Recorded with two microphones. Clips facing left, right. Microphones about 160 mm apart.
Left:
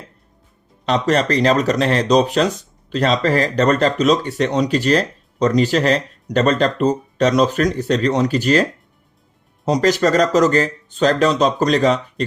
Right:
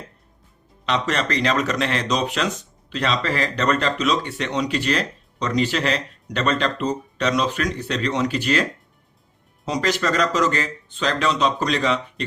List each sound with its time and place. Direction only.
0.9 s speech: 40° left (ahead or behind)
9.6 s speech: 40° left (ahead or behind)